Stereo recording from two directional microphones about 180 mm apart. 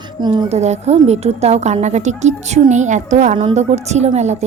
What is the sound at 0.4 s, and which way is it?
A woman's voice, 40° right (ahead or behind).